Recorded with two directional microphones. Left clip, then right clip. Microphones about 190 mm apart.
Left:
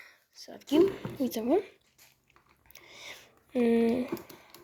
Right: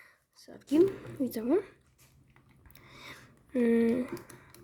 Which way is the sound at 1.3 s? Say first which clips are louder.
Left 2 dB; 35° right (ahead or behind).